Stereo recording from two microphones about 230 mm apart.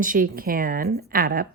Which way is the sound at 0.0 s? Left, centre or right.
Right.